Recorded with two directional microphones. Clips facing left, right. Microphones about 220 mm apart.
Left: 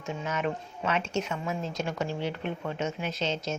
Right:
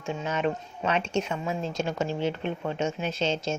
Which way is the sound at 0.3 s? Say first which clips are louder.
Right 3 dB; 30° right (ahead or behind).